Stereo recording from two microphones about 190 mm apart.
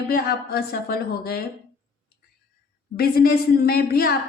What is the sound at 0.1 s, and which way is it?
A woman's voice, 55° left (ahead or behind).